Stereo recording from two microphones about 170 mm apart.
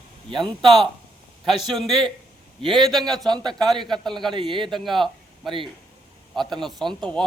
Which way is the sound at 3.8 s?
25° right (ahead or behind).